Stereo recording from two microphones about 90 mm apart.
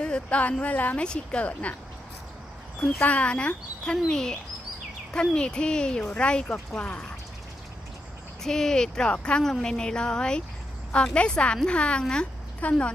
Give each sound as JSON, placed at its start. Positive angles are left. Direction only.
{"t": 0.0, "sound": "a woman's voice", "side_deg": 10}
{"t": 3.0, "sound": "a woman's voice", "side_deg": 15}
{"t": 8.5, "sound": "a woman's voice", "side_deg": 5}